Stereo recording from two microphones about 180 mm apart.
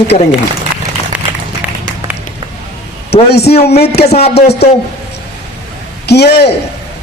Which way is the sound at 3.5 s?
35° left (ahead or behind).